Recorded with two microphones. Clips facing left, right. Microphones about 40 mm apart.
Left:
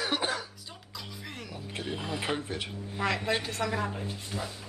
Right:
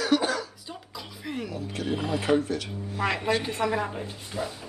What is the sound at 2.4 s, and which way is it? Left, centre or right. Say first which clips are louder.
Speech: right 5 dB; left.